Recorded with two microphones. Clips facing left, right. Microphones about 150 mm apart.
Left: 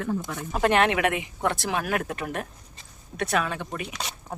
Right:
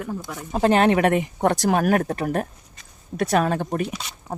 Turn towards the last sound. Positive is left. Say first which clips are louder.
# right 8 dB
turn(degrees=-45)  # may be behind; listen again after turning